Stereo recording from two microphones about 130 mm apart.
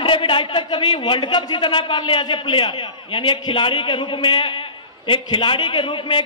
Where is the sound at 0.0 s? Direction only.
40° left (ahead or behind).